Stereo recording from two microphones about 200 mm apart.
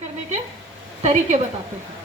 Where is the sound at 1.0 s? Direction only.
35° right (ahead or behind).